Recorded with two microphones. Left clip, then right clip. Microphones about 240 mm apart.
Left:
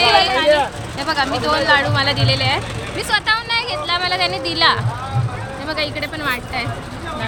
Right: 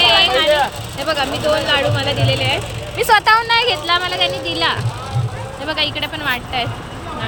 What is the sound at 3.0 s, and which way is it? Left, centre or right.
Speech, centre.